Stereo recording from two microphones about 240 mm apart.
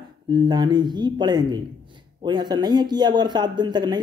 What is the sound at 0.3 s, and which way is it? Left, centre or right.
Speech, centre.